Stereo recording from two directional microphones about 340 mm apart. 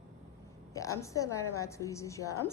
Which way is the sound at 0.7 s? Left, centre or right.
Centre.